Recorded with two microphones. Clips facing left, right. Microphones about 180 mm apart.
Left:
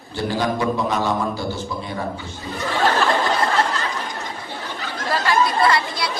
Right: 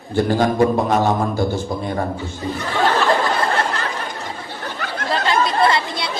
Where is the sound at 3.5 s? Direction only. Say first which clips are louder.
Even; 55° right (ahead or behind).